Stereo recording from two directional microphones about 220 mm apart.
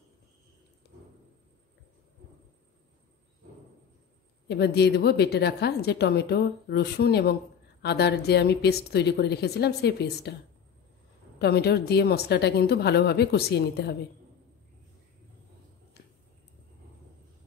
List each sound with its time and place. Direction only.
4.5 s a woman's voice: 50° left (ahead or behind)
11.3 s a woman's voice: 45° left (ahead or behind)
16.0 s a sound: 45° left (ahead or behind)